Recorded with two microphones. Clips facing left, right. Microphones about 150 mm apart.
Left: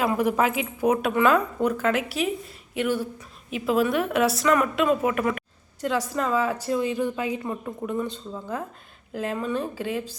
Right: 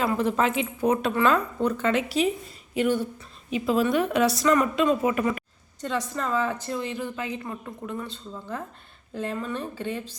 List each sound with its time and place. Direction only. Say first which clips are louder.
0.0 s a woman's voice: left 1 dB; 10° left (ahead or behind)